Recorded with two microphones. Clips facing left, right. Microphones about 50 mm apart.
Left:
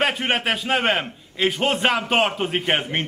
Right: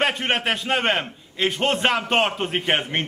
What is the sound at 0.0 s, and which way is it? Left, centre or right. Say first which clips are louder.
A man's voice: left 1 dB; centre.